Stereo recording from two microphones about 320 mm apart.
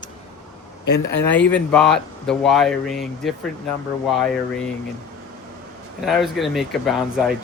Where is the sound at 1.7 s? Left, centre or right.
Centre.